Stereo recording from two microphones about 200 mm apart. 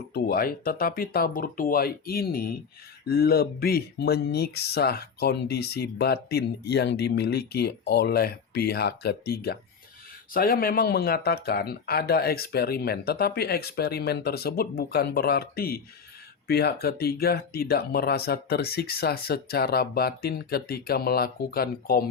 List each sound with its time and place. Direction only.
0.1 s speech: 50° left (ahead or behind)